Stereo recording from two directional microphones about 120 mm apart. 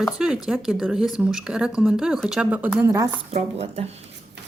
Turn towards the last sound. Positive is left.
turn(degrees=-60)  # may be behind; listen again after turning